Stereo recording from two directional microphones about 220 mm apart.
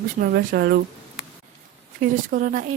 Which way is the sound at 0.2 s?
45° right (ahead or behind).